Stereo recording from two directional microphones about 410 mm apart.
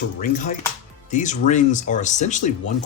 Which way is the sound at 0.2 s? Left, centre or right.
Centre.